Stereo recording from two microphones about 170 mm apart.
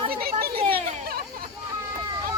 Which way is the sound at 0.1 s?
65° right (ahead or behind).